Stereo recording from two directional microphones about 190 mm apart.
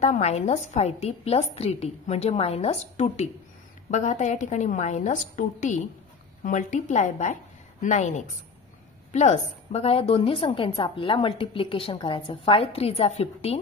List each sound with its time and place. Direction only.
0.0 s a woman's voice: 35° left (ahead or behind)